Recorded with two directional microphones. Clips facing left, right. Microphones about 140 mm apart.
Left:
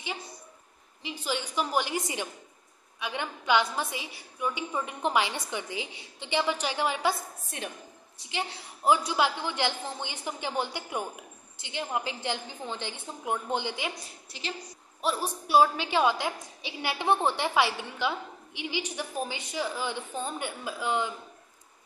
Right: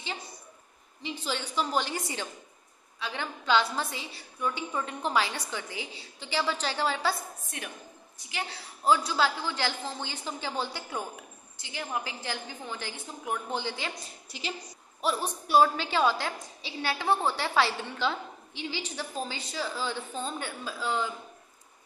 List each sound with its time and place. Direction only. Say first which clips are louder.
1.0 s a woman's voice: left 1 dB; 10° left (ahead or behind)
8.2 s a woman's voice: left 3 dB; 25° left (ahead or behind)
15.4 s a woman's voice: even; 10° left (ahead or behind)